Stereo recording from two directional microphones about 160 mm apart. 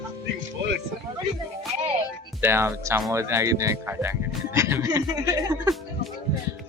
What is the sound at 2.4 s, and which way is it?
Speech, 15° right (ahead or behind).